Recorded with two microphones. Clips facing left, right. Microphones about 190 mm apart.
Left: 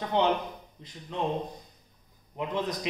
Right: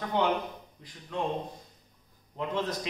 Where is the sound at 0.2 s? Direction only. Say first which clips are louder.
Left 2 dB; 25° left (ahead or behind).